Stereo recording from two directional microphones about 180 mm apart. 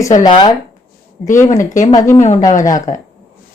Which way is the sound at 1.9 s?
15° left (ahead or behind).